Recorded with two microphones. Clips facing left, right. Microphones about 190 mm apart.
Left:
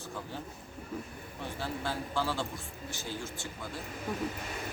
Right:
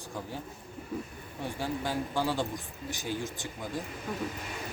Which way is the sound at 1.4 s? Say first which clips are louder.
Right 3 dB; 15° right (ahead or behind).